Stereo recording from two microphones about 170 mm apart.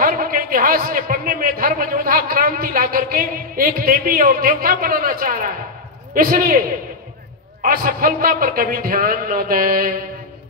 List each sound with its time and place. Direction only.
0.0 s a man's voice: 55° right (ahead or behind)
7.6 s a man's voice: 55° right (ahead or behind)